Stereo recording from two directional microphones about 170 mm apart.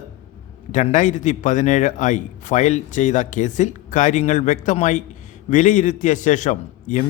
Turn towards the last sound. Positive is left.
turn(degrees=45)  # may be behind; listen again after turning